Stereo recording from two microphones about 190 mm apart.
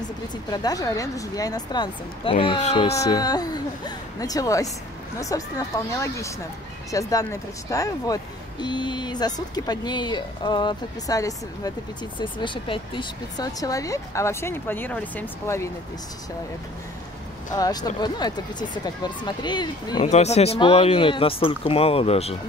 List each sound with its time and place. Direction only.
0.5 s speech: 20° left (ahead or behind)
3.0 s speech: 20° left (ahead or behind)
17.5 s speech: 20° left (ahead or behind)
20.0 s speech: 35° left (ahead or behind)